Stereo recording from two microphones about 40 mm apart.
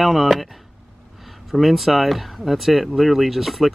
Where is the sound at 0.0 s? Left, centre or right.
Centre.